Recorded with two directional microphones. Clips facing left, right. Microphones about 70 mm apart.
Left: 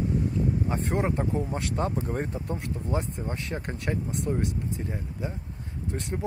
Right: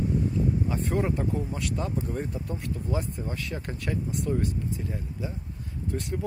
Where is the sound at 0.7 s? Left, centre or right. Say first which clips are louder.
Even; left.